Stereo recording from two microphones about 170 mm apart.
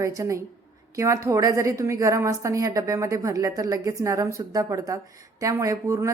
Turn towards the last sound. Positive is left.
turn(degrees=-20)  # may be behind; listen again after turning